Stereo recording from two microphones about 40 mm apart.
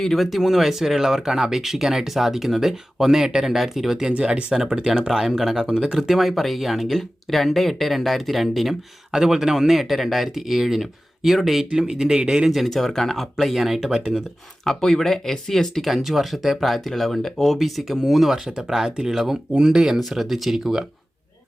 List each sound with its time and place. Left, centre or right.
0.0 s speech: centre
4.2 s speech: right; by 5.5 s centre
5.5 s speech: centre
6.0 s speech: centre
9.1 s speech: centre
11.7 s speech: centre
12.5 s speech: centre
13.9 s speech: centre
14.6 s speech: centre
15.9 s speech: centre
19.1 s speech: centre
19.5 s speech: centre
20.0 s speech: centre